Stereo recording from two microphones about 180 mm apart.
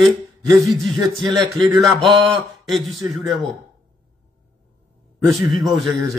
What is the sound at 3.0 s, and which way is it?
Speech, 20° right (ahead or behind).